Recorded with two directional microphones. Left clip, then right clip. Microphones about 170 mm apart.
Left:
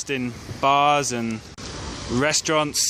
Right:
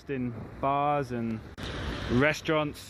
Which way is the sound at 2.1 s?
15° left (ahead or behind).